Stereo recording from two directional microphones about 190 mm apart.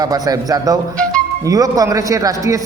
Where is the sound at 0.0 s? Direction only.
20° right (ahead or behind).